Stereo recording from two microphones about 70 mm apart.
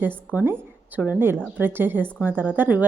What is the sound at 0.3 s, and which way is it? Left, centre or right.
A woman's voice, right.